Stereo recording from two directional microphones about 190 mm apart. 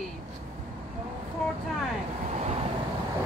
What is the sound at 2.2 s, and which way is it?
Vehicle, 35° right (ahead or behind).